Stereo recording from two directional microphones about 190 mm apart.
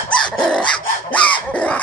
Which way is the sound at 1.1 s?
5° left (ahead or behind).